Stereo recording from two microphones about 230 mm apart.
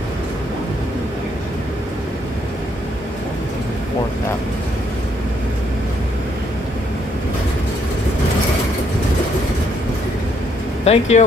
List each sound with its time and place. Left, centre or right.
10.9 s speech: left